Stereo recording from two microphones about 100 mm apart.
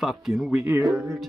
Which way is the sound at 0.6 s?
25° right (ahead or behind).